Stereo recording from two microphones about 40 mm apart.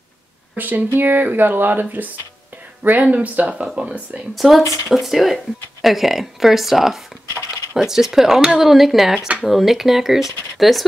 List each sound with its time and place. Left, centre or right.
0.6 s speech: right
3.0 s speech: right
3.5 s speech: right
4.4 s speech: centre